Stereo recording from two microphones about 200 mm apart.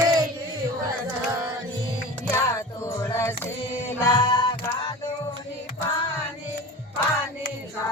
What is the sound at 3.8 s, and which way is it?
Music, 25° left (ahead or behind).